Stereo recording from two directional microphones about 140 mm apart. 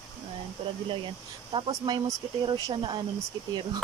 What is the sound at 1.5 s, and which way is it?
Speech, 40° right (ahead or behind).